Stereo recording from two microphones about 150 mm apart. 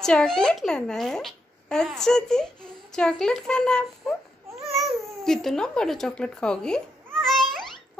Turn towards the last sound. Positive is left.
turn(degrees=0)  # may be behind; listen again after turning